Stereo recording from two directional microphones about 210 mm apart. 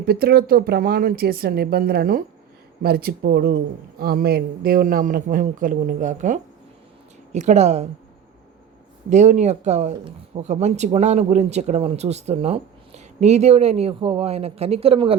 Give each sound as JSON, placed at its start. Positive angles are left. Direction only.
{"t": 0.0, "sound": "speech", "side_deg": -45}
{"t": 9.0, "sound": "speech", "side_deg": -35}